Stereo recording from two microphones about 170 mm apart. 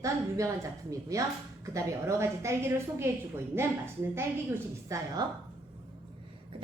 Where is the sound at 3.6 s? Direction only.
15° right (ahead or behind).